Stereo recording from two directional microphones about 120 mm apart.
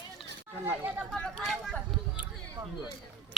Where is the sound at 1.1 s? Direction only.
5° left (ahead or behind).